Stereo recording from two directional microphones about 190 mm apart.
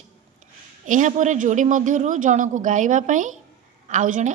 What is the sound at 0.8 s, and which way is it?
A woman's voice, 40° right (ahead or behind).